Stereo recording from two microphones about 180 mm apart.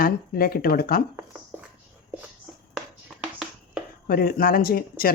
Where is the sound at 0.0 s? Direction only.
55° left (ahead or behind).